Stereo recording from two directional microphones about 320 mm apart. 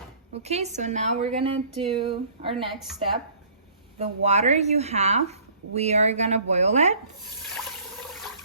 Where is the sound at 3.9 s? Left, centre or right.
Right.